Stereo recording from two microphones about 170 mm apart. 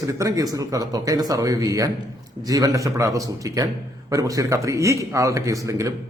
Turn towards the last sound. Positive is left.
turn(degrees=-20)  # may be behind; listen again after turning